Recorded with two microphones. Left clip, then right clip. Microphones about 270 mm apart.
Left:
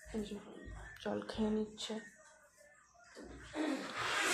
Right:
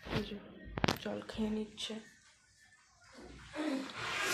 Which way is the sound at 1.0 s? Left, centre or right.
Centre.